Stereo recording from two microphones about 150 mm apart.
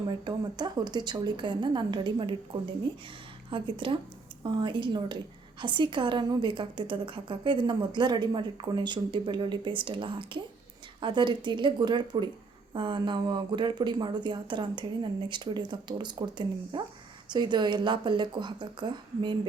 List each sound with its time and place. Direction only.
0.1 s a woman's voice: 30° right (ahead or behind)